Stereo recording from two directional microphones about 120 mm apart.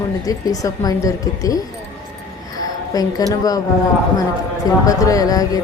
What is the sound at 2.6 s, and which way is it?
A woman's voice, 30° left (ahead or behind).